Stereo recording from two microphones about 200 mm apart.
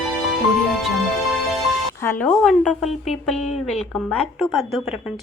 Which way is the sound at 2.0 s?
10° left (ahead or behind).